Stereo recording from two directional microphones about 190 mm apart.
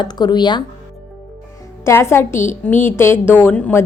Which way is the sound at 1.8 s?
15° left (ahead or behind).